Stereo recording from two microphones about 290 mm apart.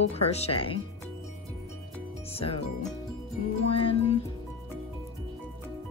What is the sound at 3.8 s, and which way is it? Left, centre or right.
Music, centre.